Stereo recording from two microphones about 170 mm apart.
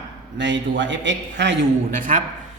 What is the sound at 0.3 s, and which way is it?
A man's voice, 90° right.